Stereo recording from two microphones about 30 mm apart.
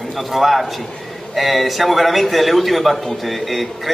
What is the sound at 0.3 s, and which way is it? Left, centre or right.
A man's voice, centre.